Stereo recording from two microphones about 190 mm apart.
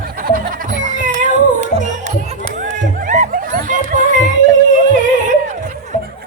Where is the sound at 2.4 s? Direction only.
40° right (ahead or behind).